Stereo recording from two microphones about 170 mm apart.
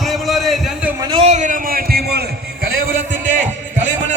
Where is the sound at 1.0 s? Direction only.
30° right (ahead or behind); by 2.3 s 65° right (ahead or behind).